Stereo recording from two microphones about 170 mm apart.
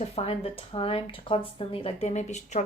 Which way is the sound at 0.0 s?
35° left (ahead or behind).